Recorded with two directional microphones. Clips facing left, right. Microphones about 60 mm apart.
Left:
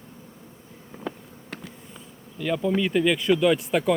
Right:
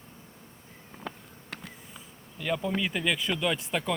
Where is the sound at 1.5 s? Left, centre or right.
Centre.